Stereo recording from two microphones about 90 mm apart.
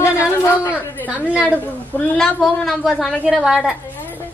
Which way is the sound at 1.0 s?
15° right (ahead or behind).